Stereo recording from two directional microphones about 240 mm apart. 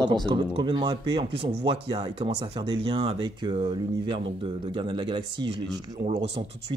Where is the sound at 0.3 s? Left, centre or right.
Right.